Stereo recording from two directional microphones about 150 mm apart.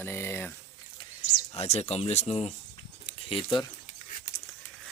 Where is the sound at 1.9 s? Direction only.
45° left (ahead or behind).